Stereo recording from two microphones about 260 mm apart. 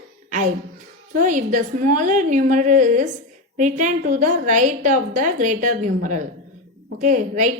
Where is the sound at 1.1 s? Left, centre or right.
Right.